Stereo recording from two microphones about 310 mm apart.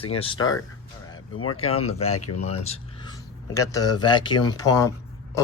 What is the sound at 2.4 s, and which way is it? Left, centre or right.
Speech, centre.